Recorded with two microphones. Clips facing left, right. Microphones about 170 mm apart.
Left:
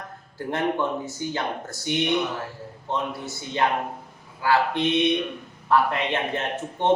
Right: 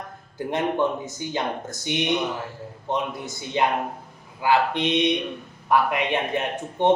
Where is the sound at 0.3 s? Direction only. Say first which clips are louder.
Right 2 dB; 15° right (ahead or behind).